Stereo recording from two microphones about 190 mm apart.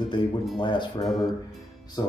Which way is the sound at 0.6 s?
25° left (ahead or behind).